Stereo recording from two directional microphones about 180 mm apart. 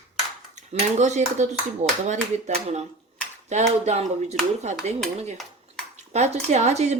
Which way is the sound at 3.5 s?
40° right (ahead or behind).